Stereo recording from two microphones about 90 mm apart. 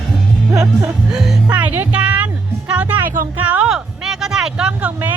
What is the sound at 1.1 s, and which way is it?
Music, 5° right (ahead or behind).